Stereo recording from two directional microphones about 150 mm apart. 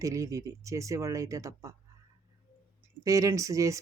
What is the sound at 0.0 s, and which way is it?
Speech, 20° right (ahead or behind).